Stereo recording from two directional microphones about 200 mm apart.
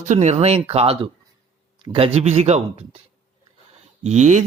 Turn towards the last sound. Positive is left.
turn(degrees=-35)  # may be behind; listen again after turning